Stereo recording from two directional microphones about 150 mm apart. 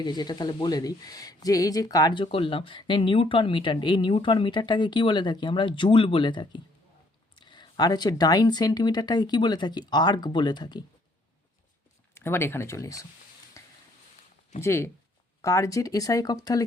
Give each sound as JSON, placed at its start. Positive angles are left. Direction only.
{"t": 0.0, "sound": "speech", "side_deg": 30}
{"t": 12.1, "sound": "speech", "side_deg": 15}
{"t": 13.6, "sound": "a sound", "side_deg": 20}
{"t": 14.6, "sound": "speech", "side_deg": 15}